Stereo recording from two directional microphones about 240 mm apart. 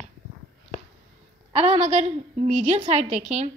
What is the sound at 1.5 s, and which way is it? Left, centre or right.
A woman's voice, right.